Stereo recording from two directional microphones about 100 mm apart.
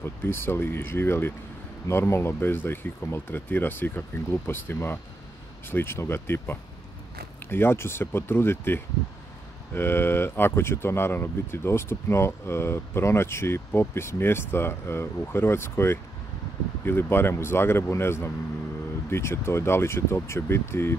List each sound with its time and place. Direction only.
0.0 s speech: 25° left (ahead or behind)